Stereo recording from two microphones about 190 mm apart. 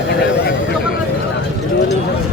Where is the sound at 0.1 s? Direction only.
60° left (ahead or behind).